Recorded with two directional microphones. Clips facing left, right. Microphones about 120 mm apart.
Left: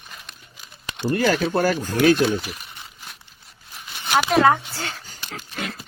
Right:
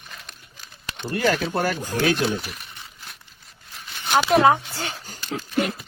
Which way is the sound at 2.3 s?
Centre (ahead or behind).